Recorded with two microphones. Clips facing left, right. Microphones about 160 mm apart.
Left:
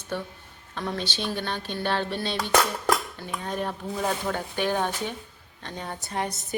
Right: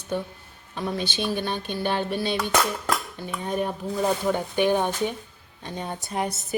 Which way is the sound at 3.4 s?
15° right (ahead or behind).